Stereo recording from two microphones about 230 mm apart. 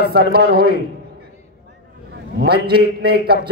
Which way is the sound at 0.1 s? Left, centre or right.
Right.